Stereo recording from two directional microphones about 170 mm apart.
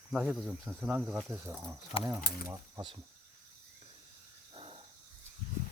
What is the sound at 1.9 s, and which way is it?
Speech, 30° left (ahead or behind).